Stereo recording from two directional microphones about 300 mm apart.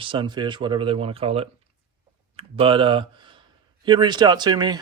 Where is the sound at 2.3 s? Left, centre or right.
Centre.